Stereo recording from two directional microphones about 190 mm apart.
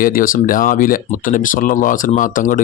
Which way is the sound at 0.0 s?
45° left (ahead or behind).